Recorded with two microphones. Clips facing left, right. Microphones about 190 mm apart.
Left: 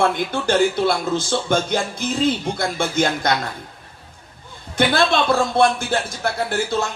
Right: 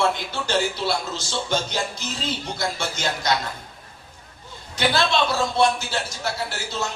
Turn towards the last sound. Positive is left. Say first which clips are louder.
# left 7 dB
turn(degrees=55)  # may be behind; listen again after turning